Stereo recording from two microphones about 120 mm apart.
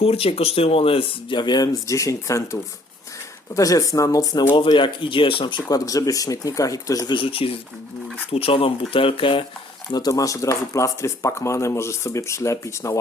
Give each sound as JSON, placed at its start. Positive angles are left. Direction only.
{"t": 0.0, "sound": "speech", "side_deg": 55}
{"t": 4.5, "sound": "speech", "side_deg": 40}
{"t": 7.1, "sound": "speech", "side_deg": 45}
{"t": 9.9, "sound": "speech", "side_deg": 30}